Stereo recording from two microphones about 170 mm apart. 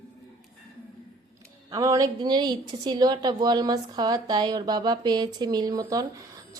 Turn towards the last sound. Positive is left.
turn(degrees=-20)  # may be behind; listen again after turning